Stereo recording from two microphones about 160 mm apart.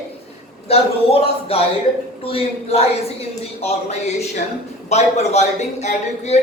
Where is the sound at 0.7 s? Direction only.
35° left (ahead or behind).